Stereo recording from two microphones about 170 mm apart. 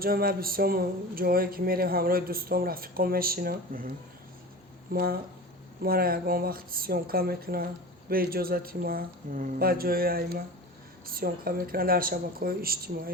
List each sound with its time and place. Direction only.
0.0 s speech: 60° right (ahead or behind)